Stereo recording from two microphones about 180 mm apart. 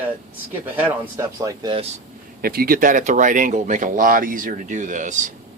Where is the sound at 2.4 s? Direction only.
55° right (ahead or behind).